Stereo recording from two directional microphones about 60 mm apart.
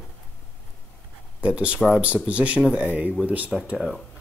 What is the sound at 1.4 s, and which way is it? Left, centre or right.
Speech, right.